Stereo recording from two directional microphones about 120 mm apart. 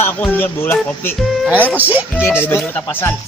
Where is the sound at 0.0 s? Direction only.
15° left (ahead or behind).